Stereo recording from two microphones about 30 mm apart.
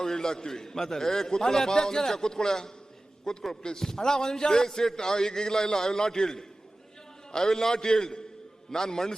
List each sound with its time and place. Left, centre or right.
0.0 s a man's voice: centre